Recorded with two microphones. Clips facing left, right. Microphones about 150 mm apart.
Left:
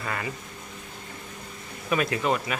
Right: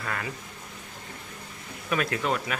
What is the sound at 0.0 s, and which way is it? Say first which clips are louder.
Speech: left 2 dB; 5° left (ahead or behind).